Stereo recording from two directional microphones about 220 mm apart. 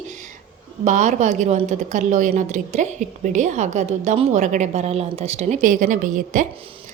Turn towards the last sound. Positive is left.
turn(degrees=-25)  # may be behind; listen again after turning